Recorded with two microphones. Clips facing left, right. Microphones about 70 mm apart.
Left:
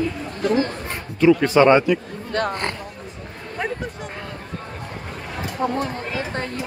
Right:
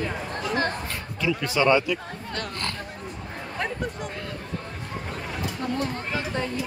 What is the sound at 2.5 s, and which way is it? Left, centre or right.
Speech, left.